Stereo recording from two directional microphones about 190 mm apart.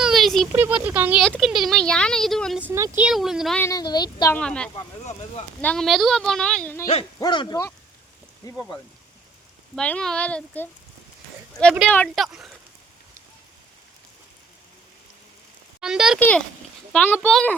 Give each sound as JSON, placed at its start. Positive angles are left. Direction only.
{"t": 0.0, "sound": "a sound", "side_deg": 0}
{"t": 0.5, "sound": "speech", "side_deg": -10}
{"t": 1.2, "sound": "speech", "side_deg": 0}
{"t": 2.6, "sound": "speech", "side_deg": -15}
{"t": 3.6, "sound": "speech", "side_deg": 20}
{"t": 4.4, "sound": "speech", "side_deg": 5}
{"t": 6.8, "sound": "speech", "side_deg": 25}
{"t": 9.7, "sound": "speech", "side_deg": 5}
{"t": 11.9, "sound": "speech", "side_deg": 5}
{"t": 15.8, "sound": "speech", "side_deg": -5}